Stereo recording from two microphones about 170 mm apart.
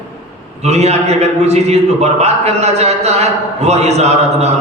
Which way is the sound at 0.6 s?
40° right (ahead or behind).